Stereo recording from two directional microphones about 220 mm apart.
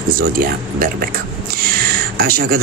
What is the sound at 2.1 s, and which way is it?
Speech, 45° right (ahead or behind).